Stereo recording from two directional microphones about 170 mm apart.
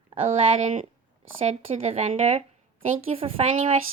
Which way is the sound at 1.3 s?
35° right (ahead or behind).